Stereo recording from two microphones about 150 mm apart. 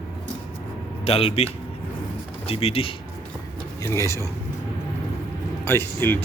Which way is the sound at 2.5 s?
40° left (ahead or behind).